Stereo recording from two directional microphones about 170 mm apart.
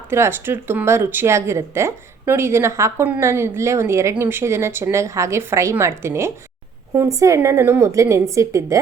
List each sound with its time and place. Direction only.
0.1 s speech: 15° right (ahead or behind)